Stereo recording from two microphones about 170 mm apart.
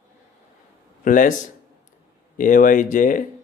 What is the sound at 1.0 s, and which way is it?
Speech, 50° left (ahead or behind).